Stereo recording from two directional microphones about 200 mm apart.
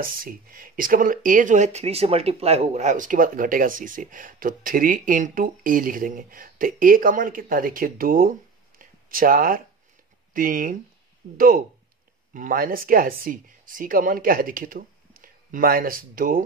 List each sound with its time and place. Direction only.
0.0 s speech: 45° right (ahead or behind)